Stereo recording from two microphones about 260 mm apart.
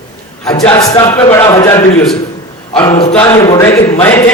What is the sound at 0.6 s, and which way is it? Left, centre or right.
A man's voice, centre.